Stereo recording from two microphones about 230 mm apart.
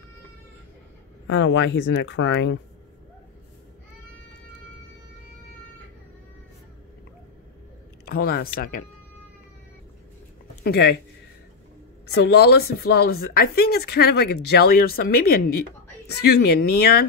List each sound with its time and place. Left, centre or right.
1.2 s speech: left
8.0 s speech: left
10.6 s speech: left
12.2 s speech: left